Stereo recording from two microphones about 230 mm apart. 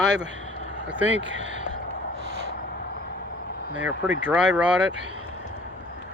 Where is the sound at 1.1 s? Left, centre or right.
Right.